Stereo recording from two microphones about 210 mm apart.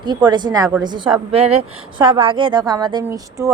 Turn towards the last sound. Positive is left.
turn(degrees=-15)  # may be behind; listen again after turning